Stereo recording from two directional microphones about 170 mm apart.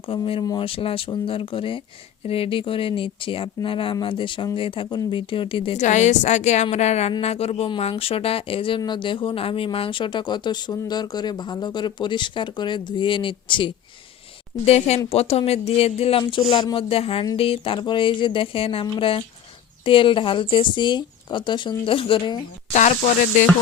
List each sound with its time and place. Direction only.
0.1 s speech: 30° left (ahead or behind)
5.7 s a woman's voice: 45° left (ahead or behind)
22.8 s a woman's voice: 50° left (ahead or behind)